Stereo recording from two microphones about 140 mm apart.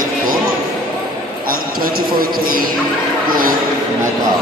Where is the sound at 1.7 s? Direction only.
90° right.